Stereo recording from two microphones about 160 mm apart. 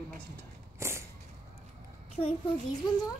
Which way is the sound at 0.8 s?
15° right (ahead or behind).